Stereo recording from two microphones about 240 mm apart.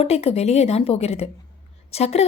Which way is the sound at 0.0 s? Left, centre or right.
Left.